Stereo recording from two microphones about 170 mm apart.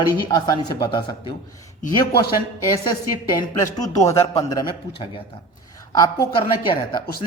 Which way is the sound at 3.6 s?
20° left (ahead or behind).